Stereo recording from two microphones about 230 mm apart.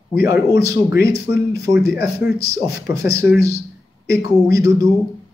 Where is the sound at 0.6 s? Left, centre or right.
Centre.